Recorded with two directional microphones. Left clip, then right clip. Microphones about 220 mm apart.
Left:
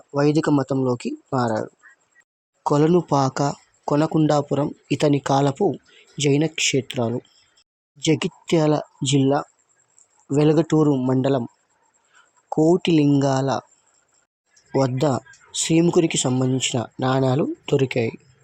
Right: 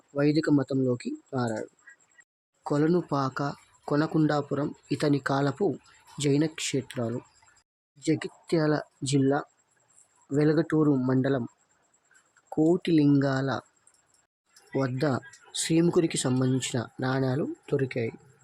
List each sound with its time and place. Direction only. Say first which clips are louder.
0.1 s speech: left 5 dB; 15° left (ahead or behind)
2.6 s speech: left 8 dB; 15° left (ahead or behind)
12.5 s speech: left 6 dB; 10° left (ahead or behind)
14.7 s speech: left 8 dB; 15° left (ahead or behind)